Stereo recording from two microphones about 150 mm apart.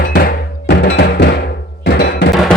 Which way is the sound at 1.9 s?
90° left.